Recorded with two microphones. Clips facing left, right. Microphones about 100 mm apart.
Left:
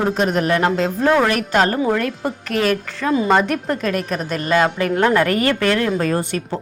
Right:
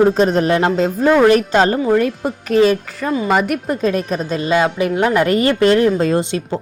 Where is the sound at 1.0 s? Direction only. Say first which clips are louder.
Right 3 dB; 10° right (ahead or behind).